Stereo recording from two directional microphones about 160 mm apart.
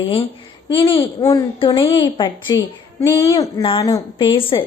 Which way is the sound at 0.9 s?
20° left (ahead or behind).